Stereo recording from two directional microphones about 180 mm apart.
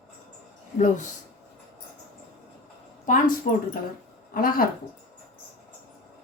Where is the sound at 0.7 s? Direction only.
45° left (ahead or behind).